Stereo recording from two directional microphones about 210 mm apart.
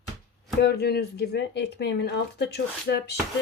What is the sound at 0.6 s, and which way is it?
Speech, 50° left (ahead or behind).